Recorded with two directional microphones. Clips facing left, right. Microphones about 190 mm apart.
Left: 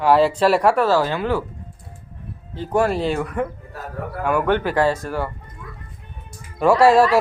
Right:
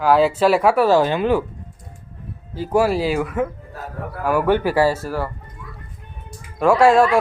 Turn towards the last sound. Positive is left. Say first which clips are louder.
# even
turn(degrees=0)  # may be behind; listen again after turning